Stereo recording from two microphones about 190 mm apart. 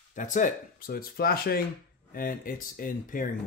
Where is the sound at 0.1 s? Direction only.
40° left (ahead or behind).